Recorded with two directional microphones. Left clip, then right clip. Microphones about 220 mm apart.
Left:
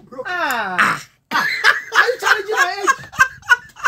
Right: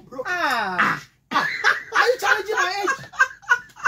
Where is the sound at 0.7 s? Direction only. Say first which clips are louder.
Left 4 dB; 40° left (ahead or behind).